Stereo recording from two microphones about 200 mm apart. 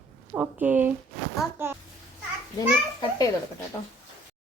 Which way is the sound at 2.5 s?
20° left (ahead or behind).